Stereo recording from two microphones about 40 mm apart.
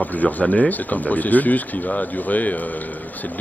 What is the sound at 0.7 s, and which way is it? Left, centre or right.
Speech, left.